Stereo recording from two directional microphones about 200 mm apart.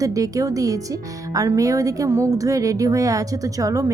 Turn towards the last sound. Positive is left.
turn(degrees=-15)  # may be behind; listen again after turning